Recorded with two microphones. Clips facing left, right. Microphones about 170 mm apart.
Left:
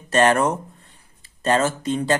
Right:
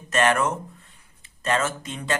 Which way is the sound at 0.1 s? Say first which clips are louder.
Left 4 dB; 35° left (ahead or behind).